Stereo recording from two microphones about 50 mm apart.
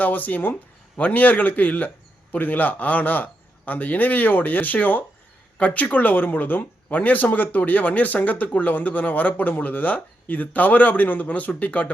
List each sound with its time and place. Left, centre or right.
0.0 s speech: left